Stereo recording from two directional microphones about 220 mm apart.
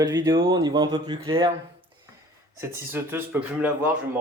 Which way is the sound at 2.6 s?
10° right (ahead or behind).